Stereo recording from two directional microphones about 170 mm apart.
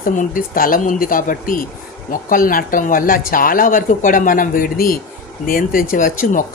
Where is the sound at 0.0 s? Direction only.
50° left (ahead or behind).